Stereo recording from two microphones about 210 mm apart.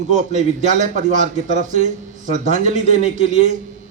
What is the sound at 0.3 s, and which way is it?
A man's voice, 35° right (ahead or behind).